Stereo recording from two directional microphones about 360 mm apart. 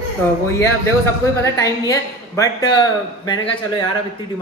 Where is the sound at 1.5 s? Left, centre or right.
Centre.